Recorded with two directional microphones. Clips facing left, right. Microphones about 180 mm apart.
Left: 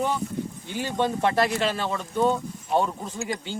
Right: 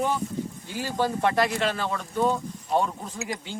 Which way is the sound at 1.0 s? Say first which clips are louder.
Left 1 dB; 25° left (ahead or behind).